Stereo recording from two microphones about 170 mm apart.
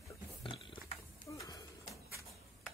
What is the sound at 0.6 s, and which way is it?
Pig, 30° left (ahead or behind).